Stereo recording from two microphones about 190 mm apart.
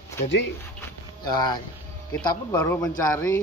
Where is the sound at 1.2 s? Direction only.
20° left (ahead or behind).